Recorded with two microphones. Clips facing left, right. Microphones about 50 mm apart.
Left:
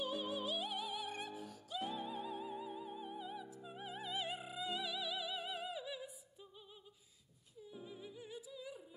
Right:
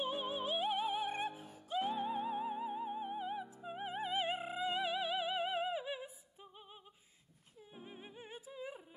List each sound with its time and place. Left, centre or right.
0.0 s music: right
7.6 s humming: right